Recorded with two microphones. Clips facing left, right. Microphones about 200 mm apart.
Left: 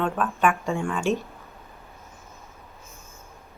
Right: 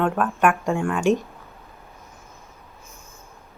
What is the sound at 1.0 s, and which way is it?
Speech, 15° right (ahead or behind).